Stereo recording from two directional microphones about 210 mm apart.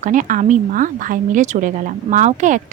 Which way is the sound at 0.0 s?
35° right (ahead or behind).